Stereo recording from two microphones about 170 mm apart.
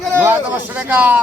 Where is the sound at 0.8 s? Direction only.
10° right (ahead or behind).